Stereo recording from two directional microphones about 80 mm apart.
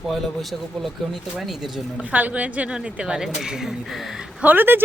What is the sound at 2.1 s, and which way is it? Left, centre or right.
A woman's voice, centre.